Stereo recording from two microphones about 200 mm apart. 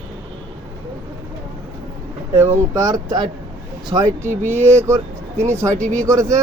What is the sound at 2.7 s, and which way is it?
Speech, 20° right (ahead or behind).